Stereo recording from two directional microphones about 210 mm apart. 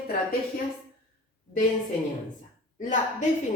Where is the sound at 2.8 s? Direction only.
35° left (ahead or behind).